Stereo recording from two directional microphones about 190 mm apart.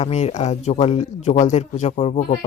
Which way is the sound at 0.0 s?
35° left (ahead or behind).